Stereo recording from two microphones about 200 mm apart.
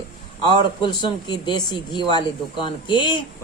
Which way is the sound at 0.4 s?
20° left (ahead or behind).